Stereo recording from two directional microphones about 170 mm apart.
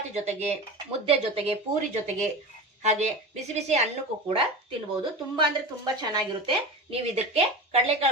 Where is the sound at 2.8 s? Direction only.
40° right (ahead or behind).